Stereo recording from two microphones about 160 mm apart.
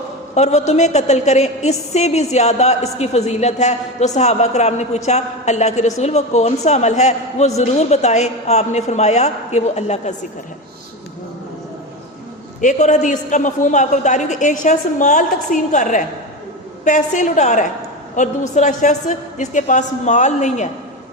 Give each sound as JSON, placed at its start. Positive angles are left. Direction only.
{"t": 0.3, "sound": "a woman's voice", "side_deg": 45}
{"t": 12.6, "sound": "a woman's voice", "side_deg": 50}